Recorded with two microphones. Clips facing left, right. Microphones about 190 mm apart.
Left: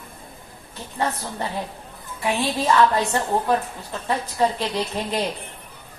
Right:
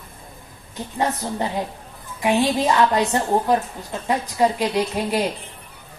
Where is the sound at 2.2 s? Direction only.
20° right (ahead or behind).